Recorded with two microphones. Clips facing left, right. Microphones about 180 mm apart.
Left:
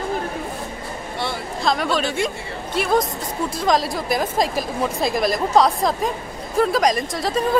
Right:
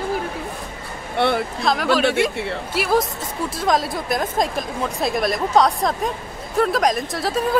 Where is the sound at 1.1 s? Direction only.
60° right (ahead or behind).